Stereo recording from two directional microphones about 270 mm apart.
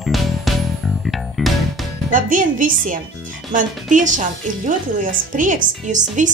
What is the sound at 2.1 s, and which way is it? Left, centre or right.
A woman's voice, right.